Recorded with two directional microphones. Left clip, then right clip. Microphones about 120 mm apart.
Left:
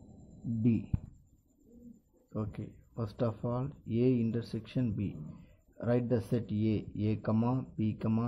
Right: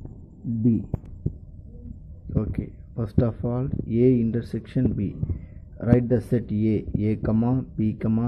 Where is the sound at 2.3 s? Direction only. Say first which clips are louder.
Right 10 dB; 40° right (ahead or behind).